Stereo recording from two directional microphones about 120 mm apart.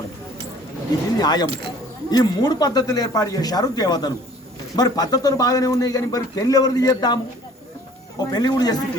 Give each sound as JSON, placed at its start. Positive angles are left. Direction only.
{"t": 1.2, "sound": "speech", "side_deg": 35}
{"t": 8.2, "sound": "speech", "side_deg": 35}